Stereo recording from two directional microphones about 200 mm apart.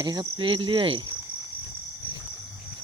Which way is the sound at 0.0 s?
20° right (ahead or behind).